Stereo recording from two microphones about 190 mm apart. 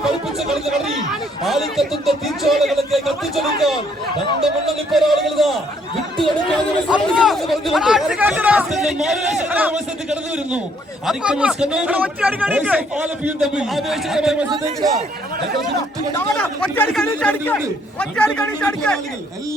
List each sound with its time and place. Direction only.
0.0 s chatter: centre (ahead or behind)
1.5 s speech: centre (ahead or behind)
6.8 s speech: 5° right (ahead or behind)
14.5 s speech: 20° right (ahead or behind)
16.3 s speech: 5° left (ahead or behind)